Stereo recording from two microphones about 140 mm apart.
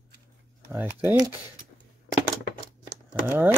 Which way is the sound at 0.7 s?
15° right (ahead or behind).